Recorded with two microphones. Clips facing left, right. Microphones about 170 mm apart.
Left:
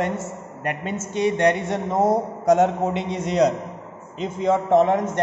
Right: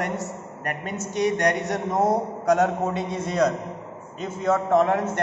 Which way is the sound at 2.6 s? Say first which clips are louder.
Left 3 dB; 20° left (ahead or behind).